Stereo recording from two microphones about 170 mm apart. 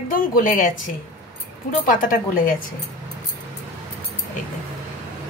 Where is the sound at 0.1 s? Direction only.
50° left (ahead or behind).